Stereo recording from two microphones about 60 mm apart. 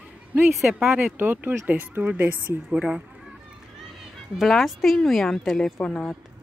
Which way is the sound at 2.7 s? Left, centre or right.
Centre.